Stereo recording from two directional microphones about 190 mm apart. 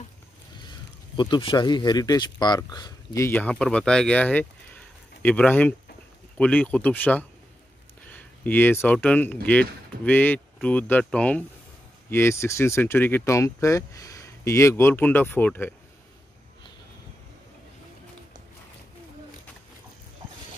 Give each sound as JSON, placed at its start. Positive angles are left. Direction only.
{"t": 0.7, "sound": "speech", "side_deg": 25}